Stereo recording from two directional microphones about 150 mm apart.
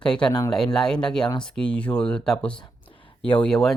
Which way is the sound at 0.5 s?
5° left (ahead or behind).